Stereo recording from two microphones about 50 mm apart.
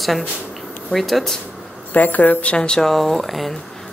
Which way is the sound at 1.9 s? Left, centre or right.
Left.